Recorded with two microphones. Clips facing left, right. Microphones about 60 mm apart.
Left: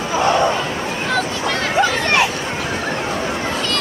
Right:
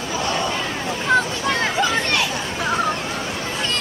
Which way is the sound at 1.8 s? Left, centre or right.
Left.